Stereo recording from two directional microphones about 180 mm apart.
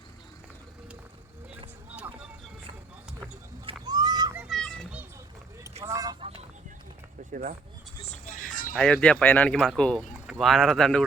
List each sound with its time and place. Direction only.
3.7 s a sound: 20° right (ahead or behind)
4.4 s children playing: centre (ahead or behind)
5.8 s vehicle: 20° right (ahead or behind)
8.1 s music: 45° left (ahead or behind)
8.7 s speech: 5° left (ahead or behind)